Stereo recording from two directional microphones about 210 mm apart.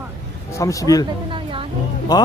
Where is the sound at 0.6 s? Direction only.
15° left (ahead or behind).